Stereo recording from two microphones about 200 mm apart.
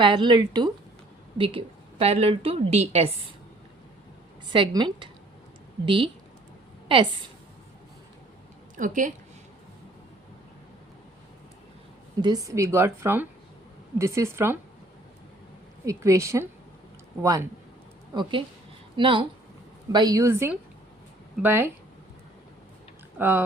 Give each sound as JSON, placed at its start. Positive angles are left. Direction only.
{"t": 0.0, "sound": "a woman's voice", "side_deg": -25}
{"t": 4.5, "sound": "a woman's voice", "side_deg": -25}
{"t": 8.7, "sound": "a woman's voice", "side_deg": -40}
{"t": 12.2, "sound": "a woman's voice", "side_deg": -20}
{"t": 15.9, "sound": "a woman's voice", "side_deg": -15}
{"t": 18.1, "sound": "a woman's voice", "side_deg": -25}
{"t": 23.1, "sound": "speech", "side_deg": -10}